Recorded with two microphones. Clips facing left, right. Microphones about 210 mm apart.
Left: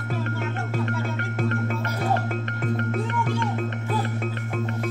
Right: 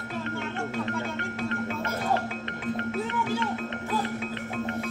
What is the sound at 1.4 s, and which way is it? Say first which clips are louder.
Music: left 4 dB; 50° left (ahead or behind).